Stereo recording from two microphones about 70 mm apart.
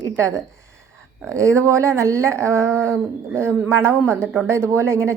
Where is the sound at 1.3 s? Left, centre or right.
Right.